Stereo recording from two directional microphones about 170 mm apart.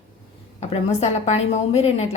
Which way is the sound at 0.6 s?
40° left (ahead or behind).